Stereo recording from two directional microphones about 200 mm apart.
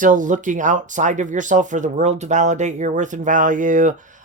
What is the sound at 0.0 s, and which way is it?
Speech, 40° right (ahead or behind).